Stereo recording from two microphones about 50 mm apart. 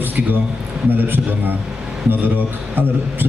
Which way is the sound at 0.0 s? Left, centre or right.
Right.